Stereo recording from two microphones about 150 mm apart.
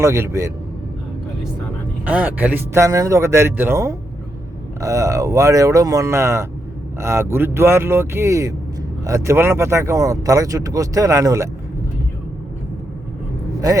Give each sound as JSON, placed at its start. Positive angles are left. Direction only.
{"t": 0.0, "sound": "speech", "side_deg": -20}
{"t": 2.0, "sound": "a man's voice", "side_deg": -10}